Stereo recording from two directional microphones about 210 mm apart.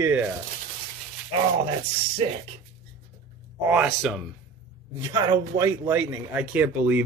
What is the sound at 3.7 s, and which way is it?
Speech, 5° right (ahead or behind).